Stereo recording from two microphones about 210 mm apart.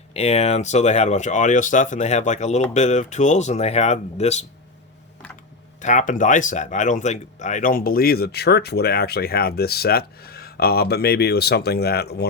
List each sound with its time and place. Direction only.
0.1 s speech: 30° left (ahead or behind)
5.8 s speech: 35° left (ahead or behind)